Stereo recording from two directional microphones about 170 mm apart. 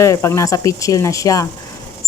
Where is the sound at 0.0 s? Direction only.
15° left (ahead or behind).